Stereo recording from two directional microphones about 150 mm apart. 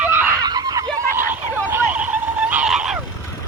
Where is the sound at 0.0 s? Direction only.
10° right (ahead or behind).